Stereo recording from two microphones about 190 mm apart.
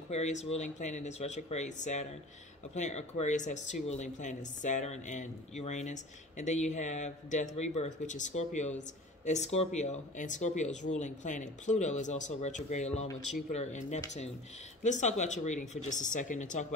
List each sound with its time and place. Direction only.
0.1 s speech: 35° left (ahead or behind)